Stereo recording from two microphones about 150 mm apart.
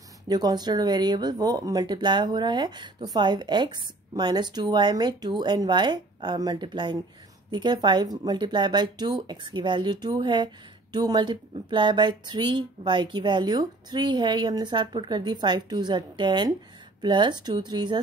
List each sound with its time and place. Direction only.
0.3 s speech: 25° right (ahead or behind)